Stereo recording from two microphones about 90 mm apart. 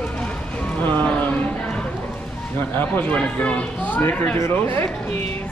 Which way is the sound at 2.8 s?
15° left (ahead or behind).